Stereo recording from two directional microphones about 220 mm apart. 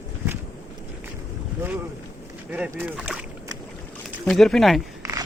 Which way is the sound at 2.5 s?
5° right (ahead or behind).